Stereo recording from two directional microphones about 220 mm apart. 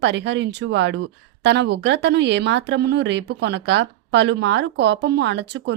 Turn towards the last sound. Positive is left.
turn(degrees=-50)  # may be behind; listen again after turning